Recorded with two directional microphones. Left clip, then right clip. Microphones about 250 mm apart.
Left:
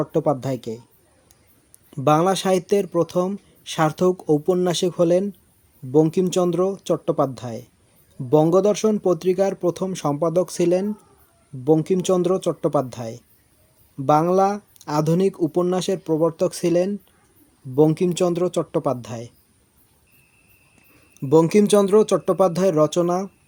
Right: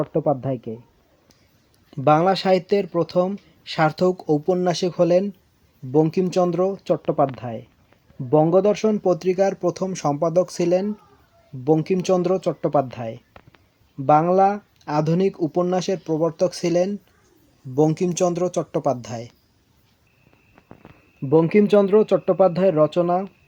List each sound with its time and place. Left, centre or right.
0.0 s speech: centre
1.9 s speech: centre
21.2 s speech: centre